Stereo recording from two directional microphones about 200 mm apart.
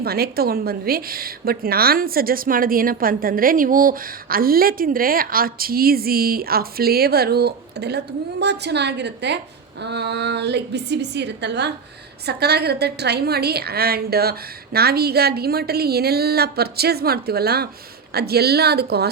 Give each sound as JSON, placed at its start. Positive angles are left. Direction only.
{"t": 0.0, "sound": "a woman's voice", "side_deg": -50}